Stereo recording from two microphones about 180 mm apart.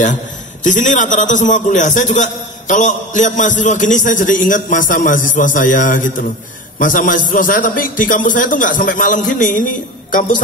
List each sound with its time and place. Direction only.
0.7 s a man's voice: 45° left (ahead or behind)